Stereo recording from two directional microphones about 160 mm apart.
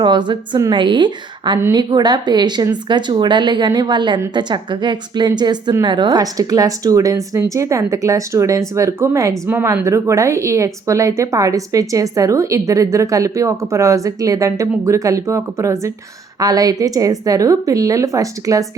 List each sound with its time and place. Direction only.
0.0 s a woman's voice: 30° right (ahead or behind)